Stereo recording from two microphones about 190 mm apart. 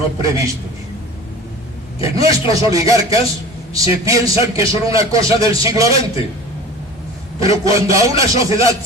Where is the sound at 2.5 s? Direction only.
15° right (ahead or behind).